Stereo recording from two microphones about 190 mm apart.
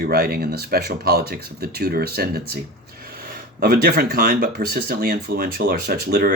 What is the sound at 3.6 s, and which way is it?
Speech, 55° right (ahead or behind).